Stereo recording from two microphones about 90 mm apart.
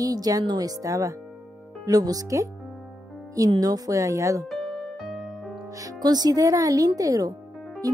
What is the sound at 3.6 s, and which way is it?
Speech, 45° right (ahead or behind).